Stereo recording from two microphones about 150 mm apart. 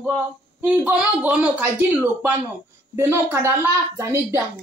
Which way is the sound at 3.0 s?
20° right (ahead or behind).